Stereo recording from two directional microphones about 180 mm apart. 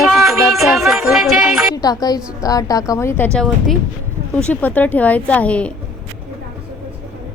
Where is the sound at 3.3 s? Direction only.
5° left (ahead or behind).